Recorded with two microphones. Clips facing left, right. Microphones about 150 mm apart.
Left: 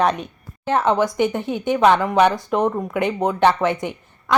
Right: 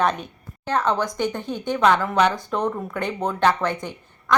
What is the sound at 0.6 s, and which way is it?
A woman's voice, 20° left (ahead or behind).